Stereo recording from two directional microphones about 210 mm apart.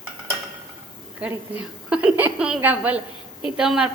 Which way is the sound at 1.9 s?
5° right (ahead or behind).